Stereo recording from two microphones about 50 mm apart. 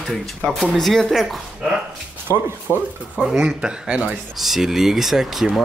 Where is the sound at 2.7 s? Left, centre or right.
Left.